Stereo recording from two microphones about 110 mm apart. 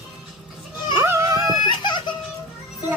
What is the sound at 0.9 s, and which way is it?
Music, 25° right (ahead or behind).